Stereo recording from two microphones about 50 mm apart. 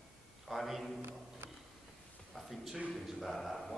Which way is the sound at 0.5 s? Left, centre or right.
Centre.